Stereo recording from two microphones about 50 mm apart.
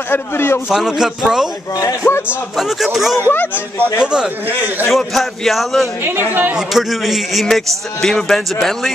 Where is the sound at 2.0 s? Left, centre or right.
Left.